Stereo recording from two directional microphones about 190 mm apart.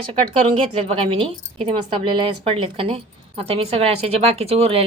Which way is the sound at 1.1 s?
25° right (ahead or behind).